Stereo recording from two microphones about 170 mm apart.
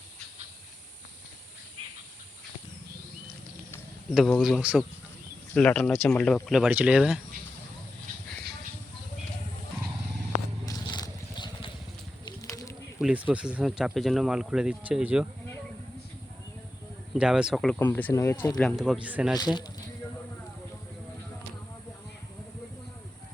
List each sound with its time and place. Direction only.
4.1 s speech: centre (ahead or behind)
6.5 s speech: 5° right (ahead or behind)
10.7 s vehicle: 25° left (ahead or behind)
12.4 s a sound: 20° left (ahead or behind)
13.0 s speech: 5° right (ahead or behind)
17.2 s speech: 5° right (ahead or behind)
17.7 s speech: 10° left (ahead or behind)
18.6 s speech: 5° right (ahead or behind)
19.4 s speech: 25° left (ahead or behind)